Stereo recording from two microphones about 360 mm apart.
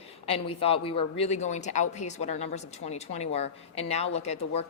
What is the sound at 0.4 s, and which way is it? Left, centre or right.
A woman's voice, centre.